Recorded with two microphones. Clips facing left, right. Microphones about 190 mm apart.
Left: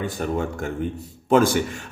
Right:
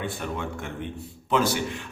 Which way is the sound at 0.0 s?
40° left (ahead or behind).